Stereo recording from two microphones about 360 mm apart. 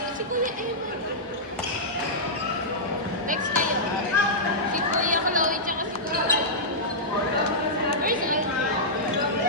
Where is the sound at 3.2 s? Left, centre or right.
Right.